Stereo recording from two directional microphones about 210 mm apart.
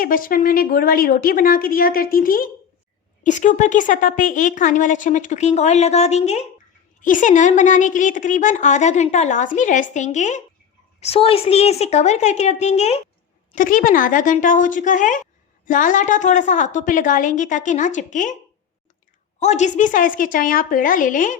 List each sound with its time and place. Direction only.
0.0 s a woman's voice: 40° left (ahead or behind)
19.4 s a woman's voice: 35° left (ahead or behind)